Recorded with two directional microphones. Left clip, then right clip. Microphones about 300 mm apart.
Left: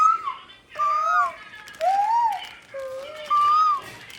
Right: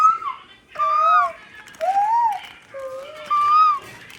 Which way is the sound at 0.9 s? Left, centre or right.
Centre.